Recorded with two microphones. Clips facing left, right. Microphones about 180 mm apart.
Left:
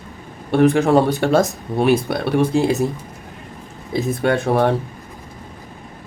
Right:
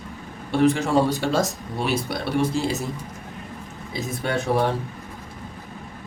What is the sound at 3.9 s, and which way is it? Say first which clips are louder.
Speech: left 8 dB; 60° left (ahead or behind).